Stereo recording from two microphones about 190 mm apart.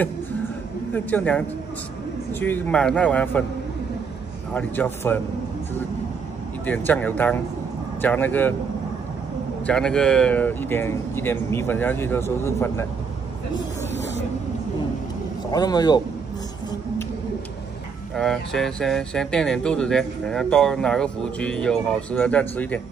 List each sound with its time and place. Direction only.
0.9 s speech: 10° left (ahead or behind)
2.4 s speech: 10° left (ahead or behind)
4.6 s speech: 10° left (ahead or behind)
6.6 s speech: 10° left (ahead or behind)
9.7 s speech: 5° left (ahead or behind)
15.5 s speech: 20° left (ahead or behind)
18.1 s speech: centre (ahead or behind)